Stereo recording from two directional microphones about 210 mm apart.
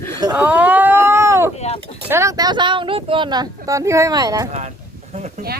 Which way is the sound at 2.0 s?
15° right (ahead or behind).